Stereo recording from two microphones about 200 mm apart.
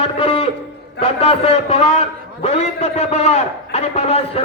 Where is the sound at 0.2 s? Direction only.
25° left (ahead or behind).